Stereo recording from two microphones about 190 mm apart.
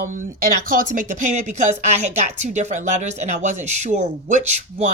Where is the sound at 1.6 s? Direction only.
40° right (ahead or behind).